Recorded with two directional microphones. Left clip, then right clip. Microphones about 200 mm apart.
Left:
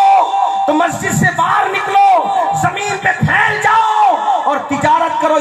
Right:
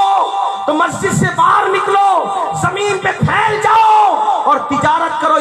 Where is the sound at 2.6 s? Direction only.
50° right (ahead or behind).